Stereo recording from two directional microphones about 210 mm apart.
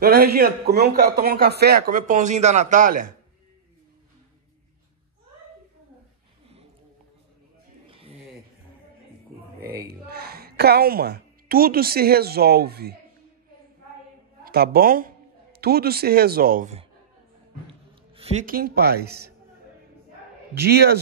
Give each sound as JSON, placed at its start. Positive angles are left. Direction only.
{"t": 0.0, "sound": "a man's voice", "side_deg": -45}
{"t": 7.9, "sound": "a sound", "side_deg": -25}
{"t": 9.8, "sound": "a woman's voice", "side_deg": -50}
{"t": 14.4, "sound": "a man's voice", "side_deg": -50}
{"t": 18.1, "sound": "a man's voice", "side_deg": -30}
{"t": 20.5, "sound": "a man's voice", "side_deg": -50}